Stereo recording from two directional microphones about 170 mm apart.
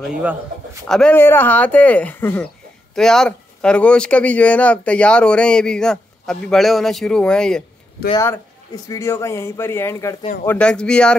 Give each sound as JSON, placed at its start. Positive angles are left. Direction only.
{"t": 0.0, "sound": "a man's voice", "side_deg": -5}
{"t": 0.8, "sound": "speech", "side_deg": 5}
{"t": 8.8, "sound": "speech", "side_deg": 15}